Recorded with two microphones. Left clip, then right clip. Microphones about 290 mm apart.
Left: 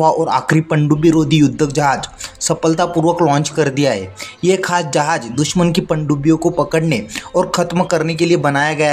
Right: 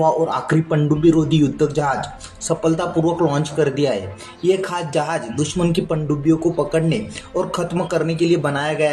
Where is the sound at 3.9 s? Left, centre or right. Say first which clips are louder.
Left 3 dB; left.